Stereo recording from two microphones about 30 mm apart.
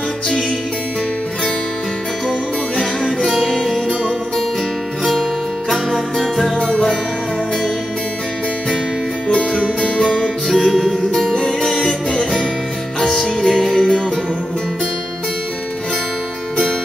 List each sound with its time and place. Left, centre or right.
3.3 s music: centre
5.7 s music: centre
6.5 s music: left
9.8 s music: left
11.6 s music: centre